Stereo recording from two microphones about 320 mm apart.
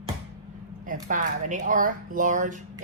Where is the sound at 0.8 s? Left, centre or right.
Right.